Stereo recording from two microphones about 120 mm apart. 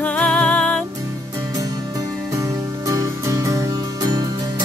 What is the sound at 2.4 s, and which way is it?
Music, 30° right (ahead or behind).